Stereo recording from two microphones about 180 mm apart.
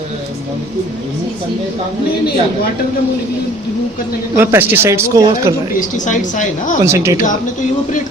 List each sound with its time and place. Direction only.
4.4 s speech: 10° right (ahead or behind)
6.1 s a woman's voice: 45° left (ahead or behind)
6.8 s speech: 15° right (ahead or behind)